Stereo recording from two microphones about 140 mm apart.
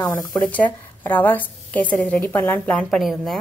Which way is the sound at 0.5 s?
10° left (ahead or behind).